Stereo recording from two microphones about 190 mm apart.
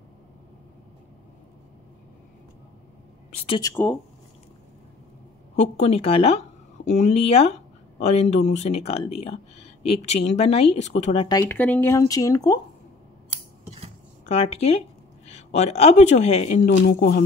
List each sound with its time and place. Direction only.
3.4 s speech: 25° left (ahead or behind)
3.7 s speech: 10° left (ahead or behind)
5.6 s speech: 35° left (ahead or behind)
11.2 s speech: 15° left (ahead or behind)
14.2 s speech: 35° left (ahead or behind)
16.6 s speech: 55° left (ahead or behind)